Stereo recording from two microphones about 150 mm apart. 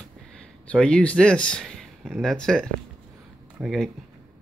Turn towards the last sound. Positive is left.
turn(degrees=0)  # may be behind; listen again after turning